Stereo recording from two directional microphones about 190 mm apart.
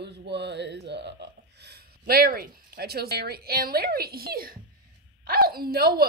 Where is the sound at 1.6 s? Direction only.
55° right (ahead or behind).